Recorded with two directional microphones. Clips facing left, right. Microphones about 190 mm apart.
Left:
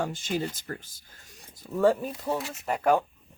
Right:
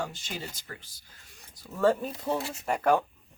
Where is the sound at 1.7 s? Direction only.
10° left (ahead or behind).